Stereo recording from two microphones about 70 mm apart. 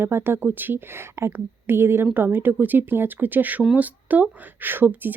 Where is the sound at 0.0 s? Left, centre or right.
Right.